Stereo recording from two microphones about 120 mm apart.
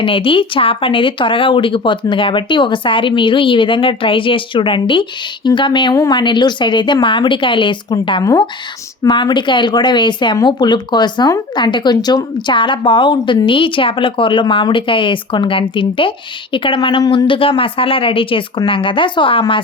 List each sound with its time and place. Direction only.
0.0 s a woman's voice: 45° left (ahead or behind)
8.2 s speech: 30° left (ahead or behind)
9.0 s a woman's voice: 40° left (ahead or behind)